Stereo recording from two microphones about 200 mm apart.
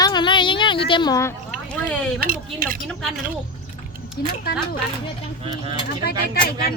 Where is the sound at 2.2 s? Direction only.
45° right (ahead or behind).